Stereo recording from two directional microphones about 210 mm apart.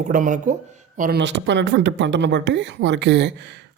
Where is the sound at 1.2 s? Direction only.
60° right (ahead or behind).